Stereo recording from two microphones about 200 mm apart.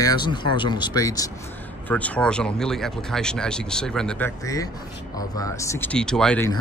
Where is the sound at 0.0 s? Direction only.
20° left (ahead or behind).